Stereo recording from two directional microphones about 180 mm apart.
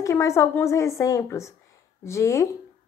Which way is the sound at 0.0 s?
15° left (ahead or behind).